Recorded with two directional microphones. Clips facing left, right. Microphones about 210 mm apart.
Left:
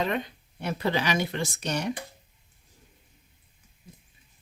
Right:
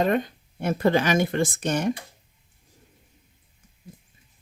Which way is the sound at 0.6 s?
50° right (ahead or behind).